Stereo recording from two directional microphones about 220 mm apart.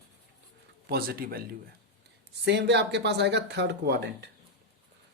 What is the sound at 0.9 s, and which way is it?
Speech, 45° right (ahead or behind).